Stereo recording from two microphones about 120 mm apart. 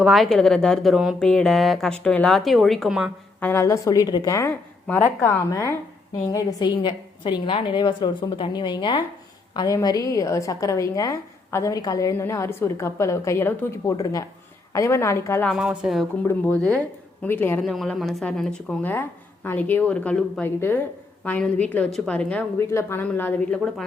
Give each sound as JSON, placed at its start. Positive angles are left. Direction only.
{"t": 0.0, "sound": "a woman's voice", "side_deg": 0}
{"t": 3.4, "sound": "a woman's voice", "side_deg": 20}
{"t": 15.4, "sound": "a woman's voice", "side_deg": -5}
{"t": 16.2, "sound": "a woman's voice", "side_deg": 15}
{"t": 17.7, "sound": "a woman's voice", "side_deg": 0}
{"t": 18.8, "sound": "a woman's voice", "side_deg": 15}
{"t": 20.6, "sound": "a woman's voice", "side_deg": 20}
{"t": 22.5, "sound": "a woman's voice", "side_deg": 20}